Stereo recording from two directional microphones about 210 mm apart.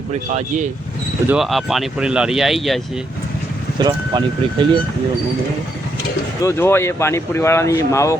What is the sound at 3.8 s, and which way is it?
Speech, 20° right (ahead or behind).